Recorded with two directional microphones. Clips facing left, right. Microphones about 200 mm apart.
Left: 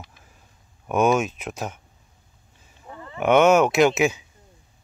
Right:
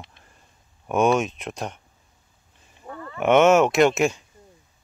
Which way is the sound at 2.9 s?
20° left (ahead or behind).